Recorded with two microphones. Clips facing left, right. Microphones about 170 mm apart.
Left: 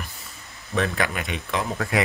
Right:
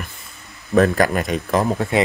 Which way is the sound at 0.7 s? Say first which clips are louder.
Right 9 dB; 45° right (ahead or behind).